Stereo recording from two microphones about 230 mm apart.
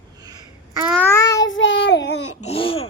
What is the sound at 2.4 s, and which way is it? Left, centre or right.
Babbling, left.